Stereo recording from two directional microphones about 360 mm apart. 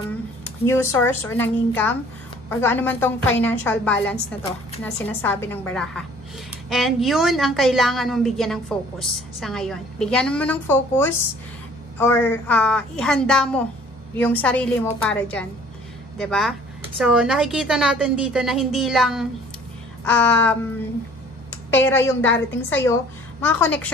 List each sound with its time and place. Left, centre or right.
0.7 s a woman's voice: centre
21.6 s a woman's voice: centre